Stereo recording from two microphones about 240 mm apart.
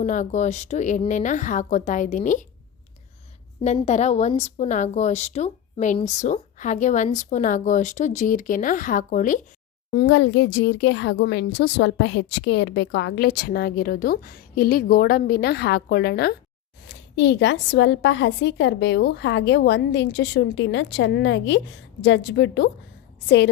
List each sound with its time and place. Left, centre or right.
0.0 s a woman's voice: left
3.6 s a woman's voice: left
9.9 s speech: left